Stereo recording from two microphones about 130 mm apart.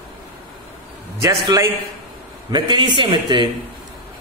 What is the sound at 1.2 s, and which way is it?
A man's voice, 25° right (ahead or behind).